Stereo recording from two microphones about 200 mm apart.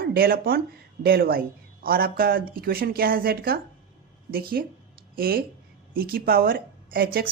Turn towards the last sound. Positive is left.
turn(degrees=-50)  # may be behind; listen again after turning